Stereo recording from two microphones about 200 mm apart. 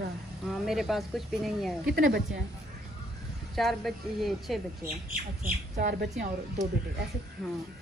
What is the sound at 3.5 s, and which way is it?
Speech, centre (ahead or behind).